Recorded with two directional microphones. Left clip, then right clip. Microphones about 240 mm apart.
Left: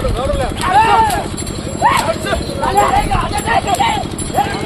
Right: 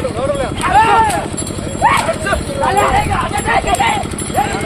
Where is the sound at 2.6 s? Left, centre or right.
Centre.